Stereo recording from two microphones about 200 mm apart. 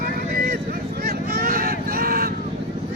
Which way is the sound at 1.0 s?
50° right (ahead or behind).